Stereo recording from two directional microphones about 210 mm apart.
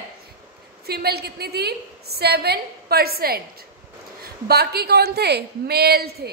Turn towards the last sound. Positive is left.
turn(degrees=-50)  # may be behind; listen again after turning